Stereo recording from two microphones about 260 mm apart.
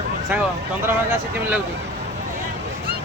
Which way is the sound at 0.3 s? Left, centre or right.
Centre.